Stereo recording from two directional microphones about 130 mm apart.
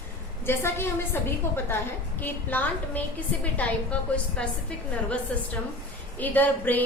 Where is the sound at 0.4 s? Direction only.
20° left (ahead or behind).